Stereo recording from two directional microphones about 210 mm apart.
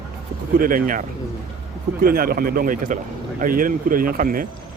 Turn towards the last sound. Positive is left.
turn(degrees=-40)  # may be behind; listen again after turning